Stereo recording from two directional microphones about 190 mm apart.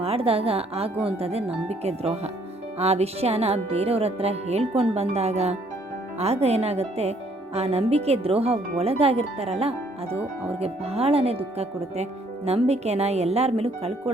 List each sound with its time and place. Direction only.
0.0 s speech: 30° right (ahead or behind)